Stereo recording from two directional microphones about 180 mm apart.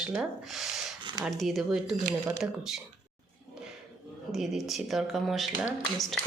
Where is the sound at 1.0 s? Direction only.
25° right (ahead or behind).